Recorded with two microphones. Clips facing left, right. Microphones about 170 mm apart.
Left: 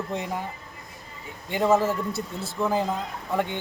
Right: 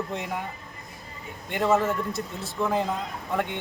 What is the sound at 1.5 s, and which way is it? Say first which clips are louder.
Speech: left 2 dB; 5° left (ahead or behind).